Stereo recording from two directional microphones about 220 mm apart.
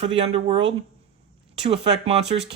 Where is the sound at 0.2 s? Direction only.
25° right (ahead or behind).